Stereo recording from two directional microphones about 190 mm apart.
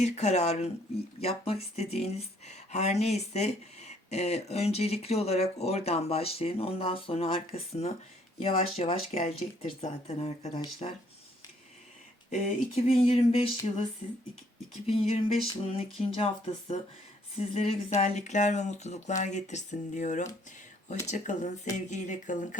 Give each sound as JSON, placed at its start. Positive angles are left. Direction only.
{"t": 0.0, "sound": "speech", "side_deg": 35}
{"t": 12.3, "sound": "speech", "side_deg": 35}